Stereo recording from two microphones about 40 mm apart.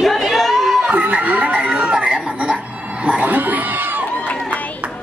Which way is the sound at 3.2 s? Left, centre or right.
Right.